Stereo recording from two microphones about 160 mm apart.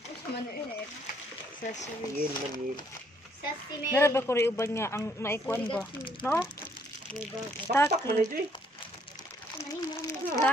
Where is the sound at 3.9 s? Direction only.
15° left (ahead or behind).